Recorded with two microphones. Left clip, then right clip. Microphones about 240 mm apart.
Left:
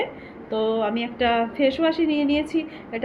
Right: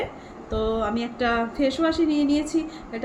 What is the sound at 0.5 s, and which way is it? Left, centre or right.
Speech, centre.